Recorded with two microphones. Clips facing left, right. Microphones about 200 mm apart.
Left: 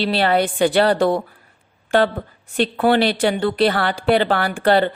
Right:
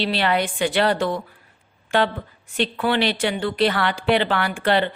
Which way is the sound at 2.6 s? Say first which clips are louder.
Left 5 dB; 40° left (ahead or behind).